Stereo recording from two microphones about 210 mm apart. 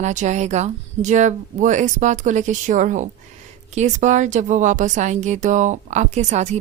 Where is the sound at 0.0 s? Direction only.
35° right (ahead or behind).